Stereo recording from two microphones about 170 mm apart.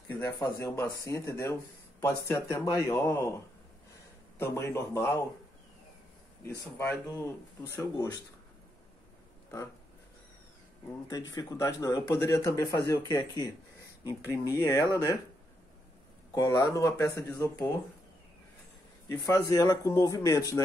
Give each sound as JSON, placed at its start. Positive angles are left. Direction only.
{"t": 0.1, "sound": "speech", "side_deg": 15}
{"t": 6.4, "sound": "speech", "side_deg": 15}
{"t": 11.3, "sound": "speech", "side_deg": 20}
{"t": 16.3, "sound": "speech", "side_deg": 20}
{"t": 19.0, "sound": "speech", "side_deg": 20}